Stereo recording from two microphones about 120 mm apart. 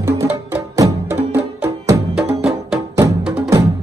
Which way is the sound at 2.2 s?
5° right (ahead or behind).